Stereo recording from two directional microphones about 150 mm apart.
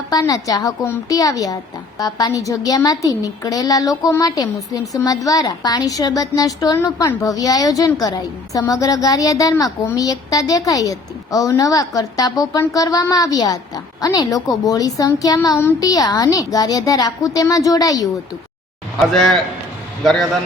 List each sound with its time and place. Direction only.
0.1 s a woman's voice: 25° left (ahead or behind)
19.1 s a man's voice: centre (ahead or behind)